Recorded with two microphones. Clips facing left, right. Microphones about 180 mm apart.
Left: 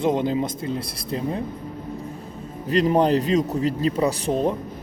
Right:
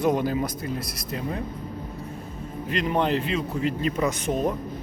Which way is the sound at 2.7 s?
35° left (ahead or behind).